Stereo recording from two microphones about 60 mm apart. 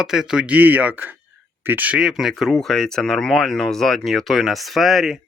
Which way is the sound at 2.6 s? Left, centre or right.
Centre.